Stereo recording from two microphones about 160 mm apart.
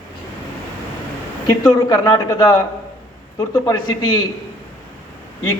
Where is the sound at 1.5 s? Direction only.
20° left (ahead or behind).